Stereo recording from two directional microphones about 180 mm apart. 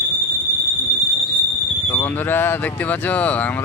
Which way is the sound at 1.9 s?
10° left (ahead or behind).